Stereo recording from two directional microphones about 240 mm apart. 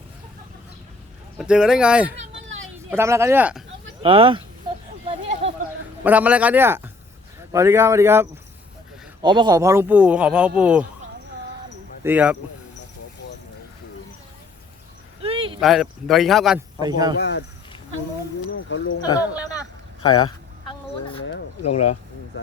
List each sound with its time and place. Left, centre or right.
1.4 s speech: centre
4.0 s speech: right
6.0 s speech: centre
12.0 s speech: centre
15.2 s a sound: right
15.6 s speech: centre
16.8 s speech: centre
17.2 s speech: left
18.5 s speech: left
20.0 s a sound: centre
21.6 s speech: left